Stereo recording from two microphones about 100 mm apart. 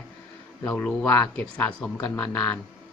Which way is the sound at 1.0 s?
20° left (ahead or behind).